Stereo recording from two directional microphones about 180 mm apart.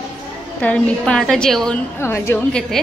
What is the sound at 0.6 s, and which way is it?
A woman's voice, 5° left (ahead or behind).